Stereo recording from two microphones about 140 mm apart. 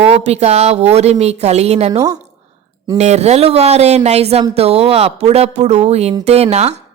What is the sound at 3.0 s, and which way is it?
Speech, 50° right (ahead or behind).